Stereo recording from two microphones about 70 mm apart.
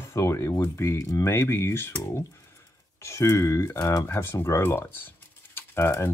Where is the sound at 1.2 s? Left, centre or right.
Left.